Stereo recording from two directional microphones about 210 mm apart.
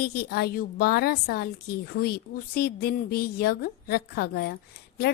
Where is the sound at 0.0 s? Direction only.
50° left (ahead or behind).